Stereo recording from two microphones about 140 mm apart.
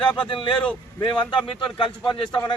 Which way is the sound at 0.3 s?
40° left (ahead or behind).